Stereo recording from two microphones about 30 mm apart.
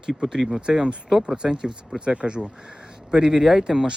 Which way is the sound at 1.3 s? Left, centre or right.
Right.